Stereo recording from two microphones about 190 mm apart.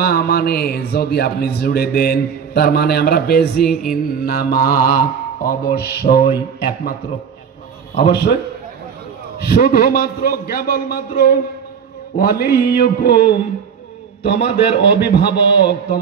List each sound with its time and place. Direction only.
0.0 s a man's voice: 55° left (ahead or behind)
8.1 s a man's voice: 60° left (ahead or behind)
9.5 s a man's voice: 50° left (ahead or behind)
14.2 s a man's voice: 60° left (ahead or behind)